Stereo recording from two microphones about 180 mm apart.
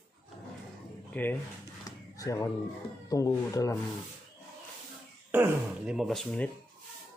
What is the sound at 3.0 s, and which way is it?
Speech, 20° left (ahead or behind).